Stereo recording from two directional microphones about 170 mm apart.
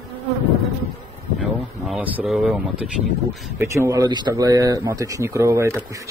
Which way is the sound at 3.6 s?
15° right (ahead or behind).